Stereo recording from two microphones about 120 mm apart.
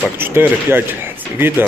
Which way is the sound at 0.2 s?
20° right (ahead or behind).